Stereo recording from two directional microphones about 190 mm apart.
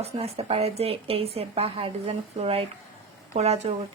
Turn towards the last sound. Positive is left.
turn(degrees=-35)  # may be behind; listen again after turning